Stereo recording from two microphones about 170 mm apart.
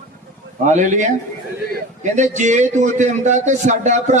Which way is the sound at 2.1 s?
45° right (ahead or behind).